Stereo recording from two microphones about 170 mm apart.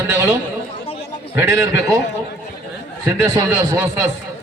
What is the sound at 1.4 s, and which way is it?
Speech, 15° right (ahead or behind).